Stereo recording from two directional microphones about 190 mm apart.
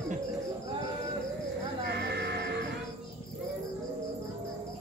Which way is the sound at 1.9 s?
60° right (ahead or behind).